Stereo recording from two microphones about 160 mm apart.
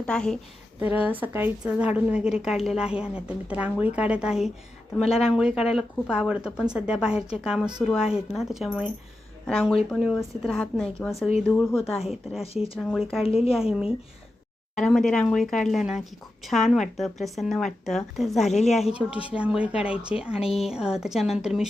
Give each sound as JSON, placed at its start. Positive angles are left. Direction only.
{"t": 0.0, "sound": "a woman's voice", "side_deg": 5}
{"t": 0.8, "sound": "a woman's voice", "side_deg": -10}
{"t": 13.2, "sound": "a woman's voice", "side_deg": 40}
{"t": 13.5, "sound": "a woman's voice", "side_deg": -5}
{"t": 20.4, "sound": "a woman's voice", "side_deg": 40}
{"t": 20.7, "sound": "a woman's voice", "side_deg": -5}